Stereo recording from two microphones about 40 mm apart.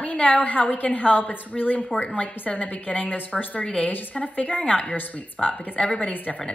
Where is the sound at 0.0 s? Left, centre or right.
Left.